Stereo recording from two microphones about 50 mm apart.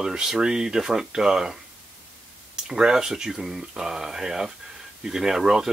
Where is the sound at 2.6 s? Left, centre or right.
Centre.